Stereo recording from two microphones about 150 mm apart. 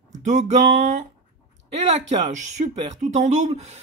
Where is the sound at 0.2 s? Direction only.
50° right (ahead or behind).